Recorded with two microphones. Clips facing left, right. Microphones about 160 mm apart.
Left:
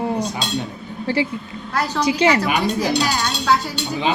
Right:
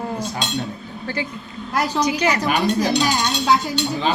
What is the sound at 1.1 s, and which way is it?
A woman's voice, 30° left (ahead or behind).